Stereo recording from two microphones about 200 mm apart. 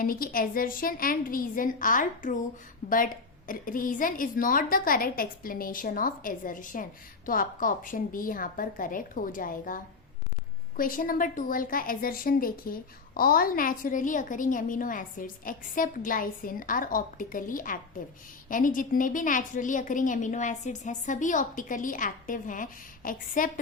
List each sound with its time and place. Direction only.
0.0 s a woman's voice: 45° left (ahead or behind)